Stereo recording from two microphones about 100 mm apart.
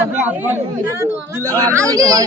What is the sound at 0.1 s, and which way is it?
Speech, 15° right (ahead or behind).